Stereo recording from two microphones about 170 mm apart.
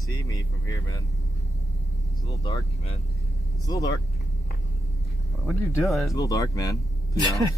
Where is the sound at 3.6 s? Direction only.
20° left (ahead or behind).